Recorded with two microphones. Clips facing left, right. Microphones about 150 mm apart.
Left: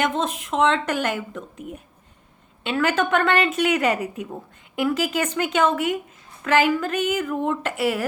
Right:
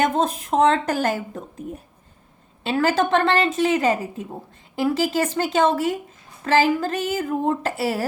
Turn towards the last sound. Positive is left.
turn(degrees=-35)  # may be behind; listen again after turning